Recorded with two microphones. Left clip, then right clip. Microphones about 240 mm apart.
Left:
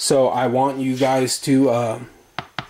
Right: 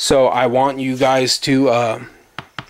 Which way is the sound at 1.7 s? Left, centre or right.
Centre.